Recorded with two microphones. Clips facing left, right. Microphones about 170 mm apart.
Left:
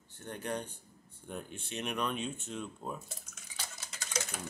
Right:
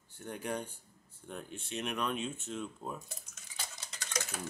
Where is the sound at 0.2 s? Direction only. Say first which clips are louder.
Even; 10° right (ahead or behind).